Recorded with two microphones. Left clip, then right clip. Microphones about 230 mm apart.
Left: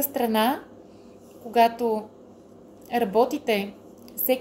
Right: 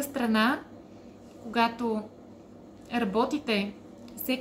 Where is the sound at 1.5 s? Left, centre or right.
Right.